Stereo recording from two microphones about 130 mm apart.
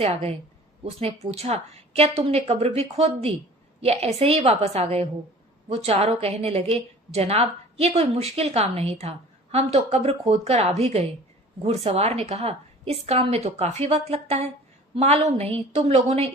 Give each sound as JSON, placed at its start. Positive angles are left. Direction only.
{"t": 0.0, "sound": "a woman's voice", "side_deg": -50}